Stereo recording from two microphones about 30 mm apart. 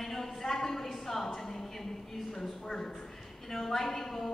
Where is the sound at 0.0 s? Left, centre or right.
Centre.